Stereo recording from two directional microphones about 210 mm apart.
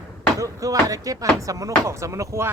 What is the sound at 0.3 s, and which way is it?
Speech, 15° right (ahead or behind).